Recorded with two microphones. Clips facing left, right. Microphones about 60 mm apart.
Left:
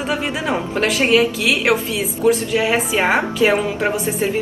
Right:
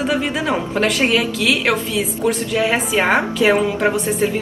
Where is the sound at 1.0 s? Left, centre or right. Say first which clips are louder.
Left 2 dB; centre.